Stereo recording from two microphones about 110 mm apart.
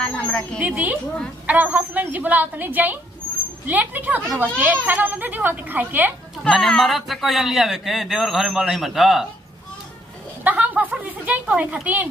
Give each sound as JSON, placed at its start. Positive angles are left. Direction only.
{"t": 0.0, "sound": "a woman's voice", "side_deg": 10}
{"t": 0.6, "sound": "speech", "side_deg": -15}
{"t": 6.4, "sound": "speech", "side_deg": 5}
{"t": 10.4, "sound": "speech", "side_deg": -15}